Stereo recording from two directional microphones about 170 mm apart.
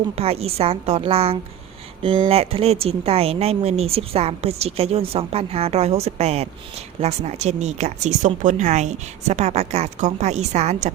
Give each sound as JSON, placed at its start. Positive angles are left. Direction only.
{"t": 0.2, "sound": "speech", "side_deg": -35}